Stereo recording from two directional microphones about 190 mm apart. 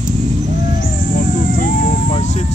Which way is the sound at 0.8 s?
45° left (ahead or behind).